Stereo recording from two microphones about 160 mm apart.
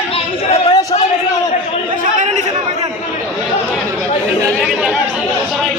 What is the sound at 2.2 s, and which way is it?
Chatter, 50° right (ahead or behind).